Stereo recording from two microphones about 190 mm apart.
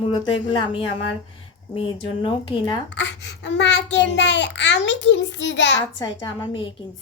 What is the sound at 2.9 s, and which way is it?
A child's voice, 70° left (ahead or behind).